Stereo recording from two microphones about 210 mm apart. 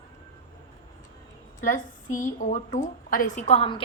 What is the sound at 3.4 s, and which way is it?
Speech, 25° left (ahead or behind).